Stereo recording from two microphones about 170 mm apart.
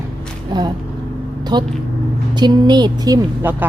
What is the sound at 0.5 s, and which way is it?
Speech, 25° right (ahead or behind).